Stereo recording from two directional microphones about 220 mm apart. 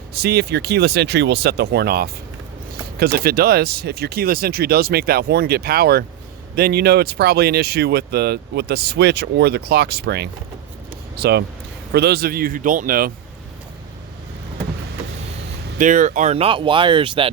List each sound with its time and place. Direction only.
0.1 s speech: 45° right (ahead or behind)
15.8 s speech: 35° right (ahead or behind)